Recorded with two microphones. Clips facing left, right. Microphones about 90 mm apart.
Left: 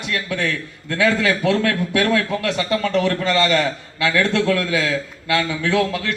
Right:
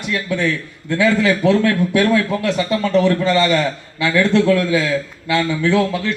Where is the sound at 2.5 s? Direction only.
30° right (ahead or behind).